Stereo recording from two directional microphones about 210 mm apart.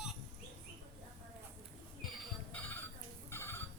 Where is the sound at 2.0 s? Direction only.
5° left (ahead or behind).